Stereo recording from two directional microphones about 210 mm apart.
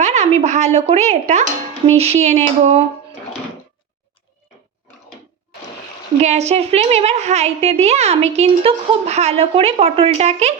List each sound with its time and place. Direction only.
0.0 s a woman's voice: 30° right (ahead or behind)
6.1 s a woman's voice: 30° right (ahead or behind)